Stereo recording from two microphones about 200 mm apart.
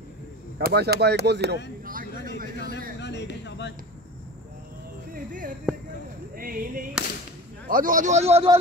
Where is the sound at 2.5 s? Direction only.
55° left (ahead or behind).